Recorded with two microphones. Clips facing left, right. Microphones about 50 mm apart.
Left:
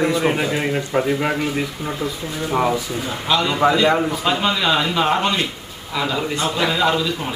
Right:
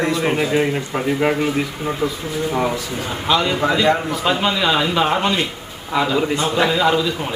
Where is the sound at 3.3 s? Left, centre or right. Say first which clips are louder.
Left 1 dB; centre.